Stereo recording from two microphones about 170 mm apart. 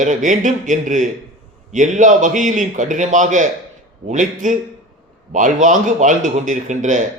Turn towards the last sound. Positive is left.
turn(degrees=-45)  # may be behind; listen again after turning